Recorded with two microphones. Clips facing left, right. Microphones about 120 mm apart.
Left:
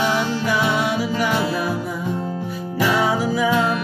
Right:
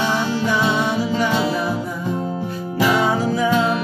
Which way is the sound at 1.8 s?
5° left (ahead or behind).